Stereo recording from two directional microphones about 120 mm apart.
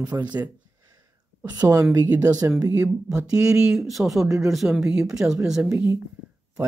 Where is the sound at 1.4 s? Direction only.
30° right (ahead or behind).